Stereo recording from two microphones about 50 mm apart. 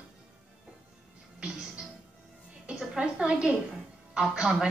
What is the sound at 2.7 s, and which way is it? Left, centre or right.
A woman's voice, centre.